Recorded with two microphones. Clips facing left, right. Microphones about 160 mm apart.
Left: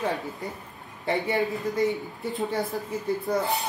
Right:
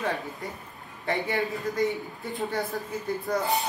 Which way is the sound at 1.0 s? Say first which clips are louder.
Left 2 dB; 20° left (ahead or behind).